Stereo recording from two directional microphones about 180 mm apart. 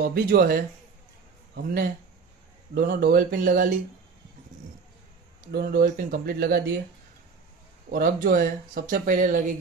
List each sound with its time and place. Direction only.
0.0 s speech: 55° right (ahead or behind)
5.5 s speech: 60° right (ahead or behind)
7.9 s speech: 50° right (ahead or behind)